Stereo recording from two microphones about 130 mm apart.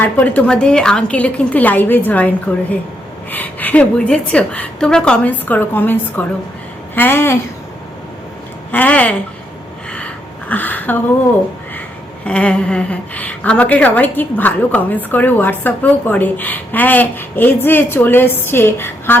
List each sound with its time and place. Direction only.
0.0 s a woman's voice: 10° left (ahead or behind)
8.7 s a woman's voice: 10° left (ahead or behind)
10.5 s a woman's voice: 15° left (ahead or behind)
12.2 s a woman's voice: 10° left (ahead or behind)